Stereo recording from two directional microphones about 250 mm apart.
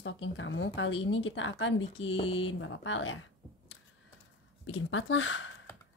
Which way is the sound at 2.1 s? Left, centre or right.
Left.